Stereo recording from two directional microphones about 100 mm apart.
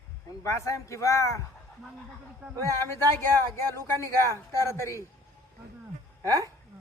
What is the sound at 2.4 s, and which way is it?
Speech, 20° right (ahead or behind).